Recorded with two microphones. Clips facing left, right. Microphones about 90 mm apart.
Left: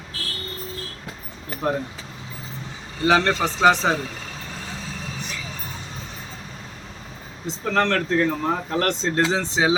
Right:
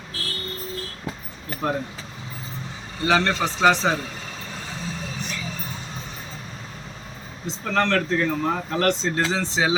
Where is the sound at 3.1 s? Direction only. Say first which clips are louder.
Left 2 dB; 10° left (ahead or behind).